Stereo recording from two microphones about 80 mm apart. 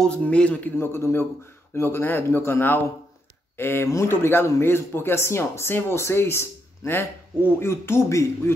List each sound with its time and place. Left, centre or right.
0.0 s a man's voice: centre
0.7 s a man's voice: left